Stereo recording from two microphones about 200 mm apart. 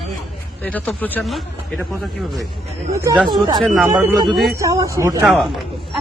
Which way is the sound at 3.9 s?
15° right (ahead or behind).